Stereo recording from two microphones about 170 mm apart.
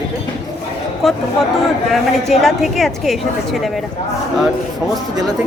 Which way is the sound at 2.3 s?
Centre (ahead or behind).